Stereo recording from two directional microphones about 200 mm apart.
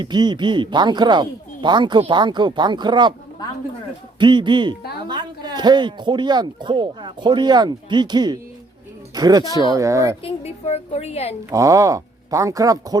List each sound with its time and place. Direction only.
0.0 s speech: 20° right (ahead or behind)
4.2 s speech: 25° right (ahead or behind)
10.2 s a woman's voice: 30° left (ahead or behind)
11.5 s speech: 15° right (ahead or behind)